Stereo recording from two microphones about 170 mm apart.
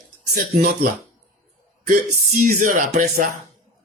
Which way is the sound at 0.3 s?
60° right (ahead or behind).